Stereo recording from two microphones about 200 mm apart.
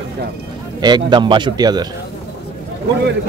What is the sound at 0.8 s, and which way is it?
A man's voice, 20° right (ahead or behind).